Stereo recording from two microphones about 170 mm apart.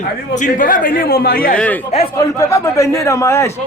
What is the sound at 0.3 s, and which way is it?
A man's voice, 50° left (ahead or behind).